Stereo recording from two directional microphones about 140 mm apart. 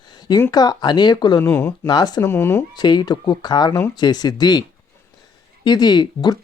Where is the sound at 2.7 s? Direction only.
30° left (ahead or behind).